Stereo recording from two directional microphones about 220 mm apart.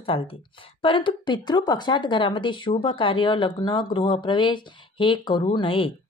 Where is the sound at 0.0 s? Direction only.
25° left (ahead or behind).